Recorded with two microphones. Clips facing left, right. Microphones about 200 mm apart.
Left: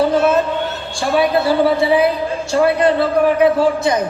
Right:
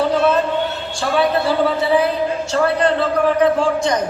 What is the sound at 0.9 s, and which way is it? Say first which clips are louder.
A man's voice: left 2 dB; 10° left (ahead or behind).